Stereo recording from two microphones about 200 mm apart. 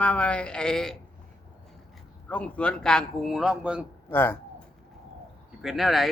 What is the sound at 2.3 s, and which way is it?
Speech, 5° left (ahead or behind).